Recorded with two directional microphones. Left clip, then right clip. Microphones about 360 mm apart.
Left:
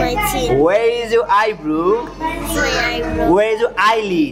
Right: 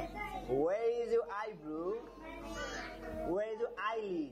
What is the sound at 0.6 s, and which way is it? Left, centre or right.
A man's voice, centre.